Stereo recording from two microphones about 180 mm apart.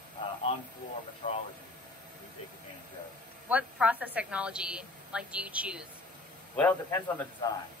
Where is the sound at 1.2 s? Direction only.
45° left (ahead or behind).